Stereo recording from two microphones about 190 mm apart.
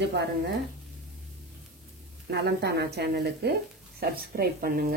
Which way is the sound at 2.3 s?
60° right (ahead or behind).